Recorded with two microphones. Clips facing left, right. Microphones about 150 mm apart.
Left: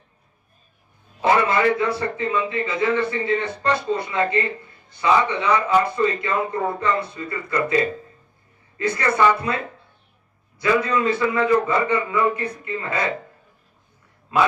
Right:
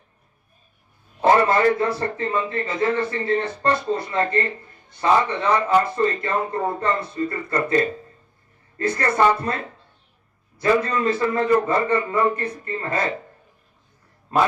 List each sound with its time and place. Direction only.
1.2 s a man's voice: 45° right (ahead or behind)
8.8 s a man's voice: 45° right (ahead or behind)
10.6 s a man's voice: 45° right (ahead or behind)